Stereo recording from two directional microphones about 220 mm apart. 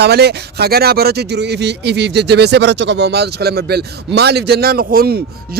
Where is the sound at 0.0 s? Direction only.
50° right (ahead or behind).